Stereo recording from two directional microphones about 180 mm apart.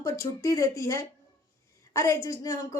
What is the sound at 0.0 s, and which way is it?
A woman's voice, 15° left (ahead or behind).